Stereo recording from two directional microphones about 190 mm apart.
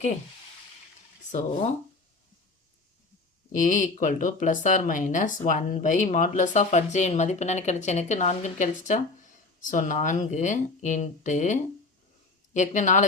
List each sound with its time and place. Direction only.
1.3 s speech: 35° left (ahead or behind)
3.5 s speech: 45° left (ahead or behind)